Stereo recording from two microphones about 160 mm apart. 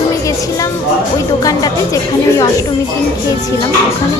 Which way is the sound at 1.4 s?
20° left (ahead or behind).